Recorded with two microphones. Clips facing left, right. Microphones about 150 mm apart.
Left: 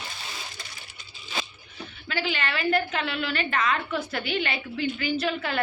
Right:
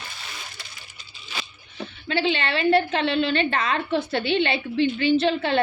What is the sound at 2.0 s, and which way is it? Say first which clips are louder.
A woman's voice: right 6 dB; 25° right (ahead or behind).